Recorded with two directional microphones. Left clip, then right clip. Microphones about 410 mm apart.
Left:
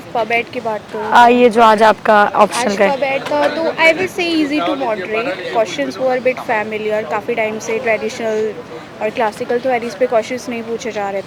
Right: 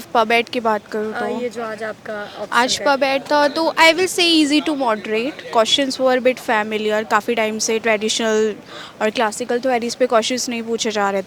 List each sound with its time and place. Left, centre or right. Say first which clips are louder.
0.1 s speech: right 1 dB; right
1.3 s speech: left 16 dB; left
2.6 s a woman's voice: left 1 dB; right